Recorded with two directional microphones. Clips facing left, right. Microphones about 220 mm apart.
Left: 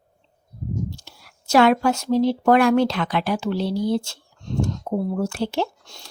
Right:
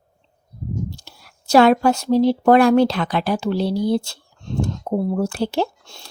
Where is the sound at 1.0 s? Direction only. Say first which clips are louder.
Right 1 dB; 35° right (ahead or behind).